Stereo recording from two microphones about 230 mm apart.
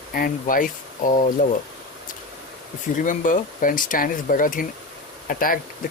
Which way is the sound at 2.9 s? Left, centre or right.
Left.